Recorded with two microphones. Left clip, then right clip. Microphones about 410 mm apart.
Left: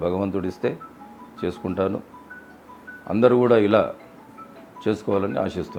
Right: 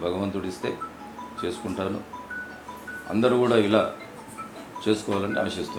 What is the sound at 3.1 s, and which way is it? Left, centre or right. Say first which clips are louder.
A man's voice: left 5 dB; left.